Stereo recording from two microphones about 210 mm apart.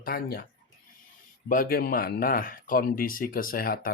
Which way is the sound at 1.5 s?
40° left (ahead or behind).